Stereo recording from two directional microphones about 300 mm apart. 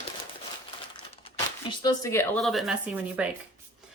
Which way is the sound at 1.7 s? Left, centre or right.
Centre.